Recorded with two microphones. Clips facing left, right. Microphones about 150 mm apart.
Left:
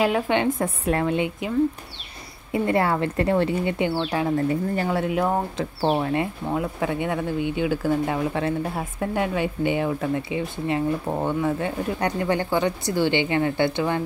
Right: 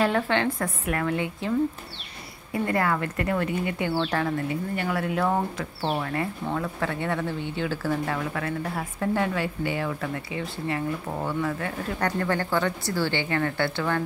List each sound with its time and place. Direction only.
0.0 s speech: 15° left (ahead or behind)
2.5 s speech: 25° left (ahead or behind)
4.5 s speech: 35° left (ahead or behind)
5.8 s speech: 35° left (ahead or behind)
6.4 s speech: 15° left (ahead or behind)